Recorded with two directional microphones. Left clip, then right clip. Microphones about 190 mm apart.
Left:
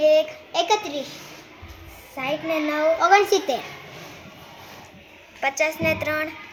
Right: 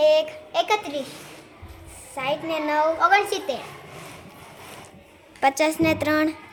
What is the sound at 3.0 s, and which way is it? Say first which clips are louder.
Speech: left 2 dB; 40° left (ahead or behind).